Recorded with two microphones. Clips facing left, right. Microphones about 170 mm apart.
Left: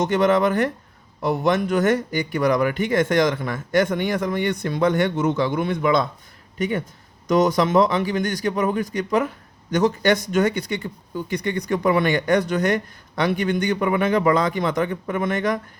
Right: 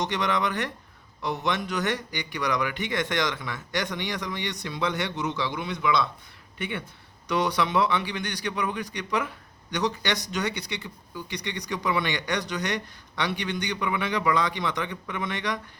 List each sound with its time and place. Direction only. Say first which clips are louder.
0.0 s speech: left 9 dB; 50° left (ahead or behind)